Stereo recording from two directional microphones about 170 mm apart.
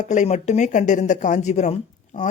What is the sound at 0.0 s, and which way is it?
Speech, 45° left (ahead or behind).